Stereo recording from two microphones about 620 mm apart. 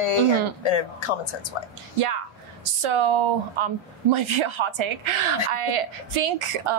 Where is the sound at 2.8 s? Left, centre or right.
Right.